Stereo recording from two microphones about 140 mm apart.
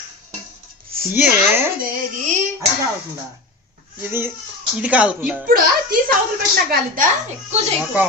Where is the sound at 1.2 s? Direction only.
15° right (ahead or behind).